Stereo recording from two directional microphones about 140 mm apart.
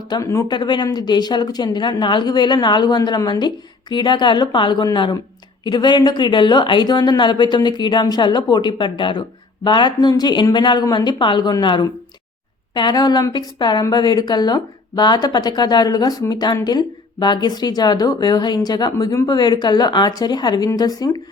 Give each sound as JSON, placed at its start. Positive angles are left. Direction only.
{"t": 0.1, "sound": "a woman's voice", "side_deg": 20}